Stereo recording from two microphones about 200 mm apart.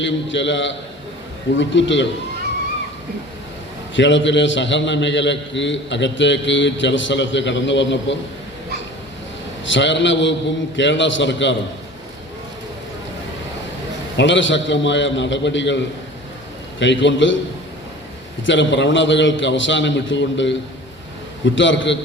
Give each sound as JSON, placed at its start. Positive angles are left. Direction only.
{"t": 0.0, "sound": "a man's voice", "side_deg": 65}
{"t": 3.9, "sound": "a man's voice", "side_deg": 65}
{"t": 9.6, "sound": "a man's voice", "side_deg": 65}
{"t": 14.2, "sound": "a man's voice", "side_deg": 65}
{"t": 16.8, "sound": "a man's voice", "side_deg": 65}
{"t": 18.4, "sound": "a man's voice", "side_deg": 65}